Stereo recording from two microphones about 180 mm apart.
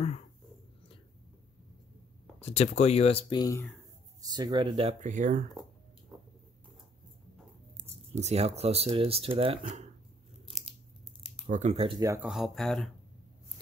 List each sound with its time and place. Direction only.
2.4 s speech: 35° left (ahead or behind); by 3.7 s 20° left (ahead or behind)
4.2 s speech: 20° right (ahead or behind)
5.0 s speech: 45° right (ahead or behind)
8.1 s speech: 40° right (ahead or behind)
11.4 s speech: 40° right (ahead or behind)
12.0 s speech: 15° right (ahead or behind)
12.3 s speech: centre (ahead or behind)